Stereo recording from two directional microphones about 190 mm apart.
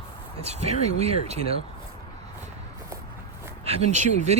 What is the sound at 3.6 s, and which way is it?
Speech, 35° right (ahead or behind).